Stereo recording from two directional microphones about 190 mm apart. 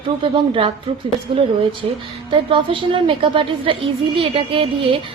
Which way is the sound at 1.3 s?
25° right (ahead or behind).